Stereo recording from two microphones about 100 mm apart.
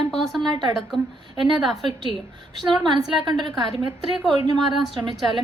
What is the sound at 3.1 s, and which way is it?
Speech, 50° right (ahead or behind).